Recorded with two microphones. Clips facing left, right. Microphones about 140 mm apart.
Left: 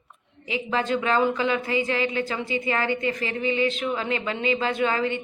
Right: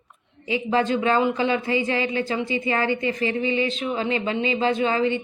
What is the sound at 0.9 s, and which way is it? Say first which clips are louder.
A woman's voice: right 2 dB; 30° right (ahead or behind).